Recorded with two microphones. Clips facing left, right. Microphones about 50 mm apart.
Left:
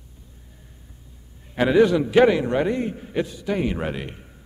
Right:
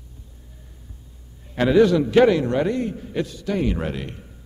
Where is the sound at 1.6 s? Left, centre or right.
Centre.